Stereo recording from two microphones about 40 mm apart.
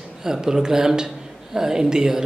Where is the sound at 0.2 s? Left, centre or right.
Centre.